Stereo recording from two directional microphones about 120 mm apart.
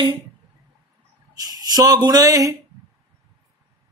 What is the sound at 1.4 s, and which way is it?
Speech, 30° right (ahead or behind).